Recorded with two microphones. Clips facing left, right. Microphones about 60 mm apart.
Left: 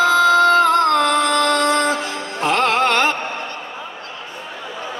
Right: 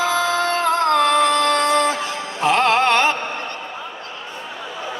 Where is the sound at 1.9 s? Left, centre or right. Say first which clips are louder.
Left 1 dB; left.